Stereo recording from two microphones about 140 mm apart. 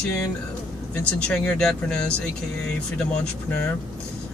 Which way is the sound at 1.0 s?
10° left (ahead or behind).